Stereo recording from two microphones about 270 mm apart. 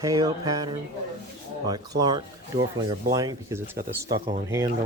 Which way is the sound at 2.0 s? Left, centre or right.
Centre.